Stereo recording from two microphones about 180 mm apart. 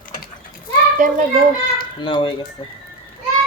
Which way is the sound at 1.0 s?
45° right (ahead or behind).